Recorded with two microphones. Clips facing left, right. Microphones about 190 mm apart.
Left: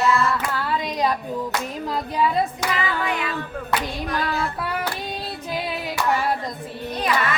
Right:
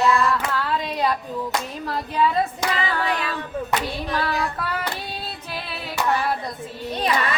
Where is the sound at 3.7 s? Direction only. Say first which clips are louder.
Left 1 dB; 20° right (ahead or behind).